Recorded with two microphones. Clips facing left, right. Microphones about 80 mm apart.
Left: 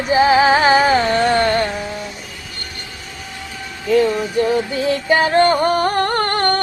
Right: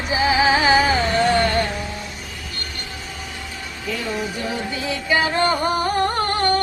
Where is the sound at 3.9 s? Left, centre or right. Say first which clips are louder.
Left 10 dB; left.